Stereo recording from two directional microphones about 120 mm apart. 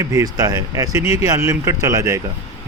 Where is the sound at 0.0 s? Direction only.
30° right (ahead or behind).